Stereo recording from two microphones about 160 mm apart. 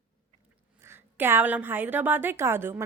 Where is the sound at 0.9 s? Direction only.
15° right (ahead or behind).